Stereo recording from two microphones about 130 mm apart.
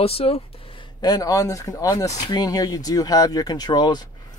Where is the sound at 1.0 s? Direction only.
30° left (ahead or behind).